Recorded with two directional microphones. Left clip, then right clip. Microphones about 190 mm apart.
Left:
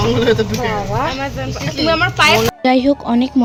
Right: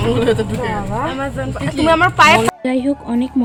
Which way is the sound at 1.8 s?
25° right (ahead or behind).